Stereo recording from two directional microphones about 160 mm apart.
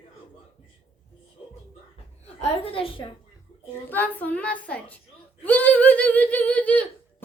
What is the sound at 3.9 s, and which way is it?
A woman's voice, 10° left (ahead or behind).